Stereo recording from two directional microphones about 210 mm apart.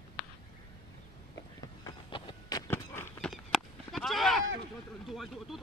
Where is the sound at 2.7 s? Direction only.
10° left (ahead or behind).